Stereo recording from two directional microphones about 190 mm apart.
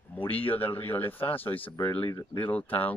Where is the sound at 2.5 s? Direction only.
10° left (ahead or behind).